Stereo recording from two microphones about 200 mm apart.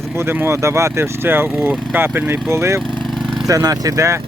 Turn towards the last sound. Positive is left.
turn(degrees=-15)  # may be behind; listen again after turning